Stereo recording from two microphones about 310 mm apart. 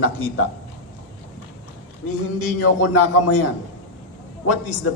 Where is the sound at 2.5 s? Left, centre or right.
Left.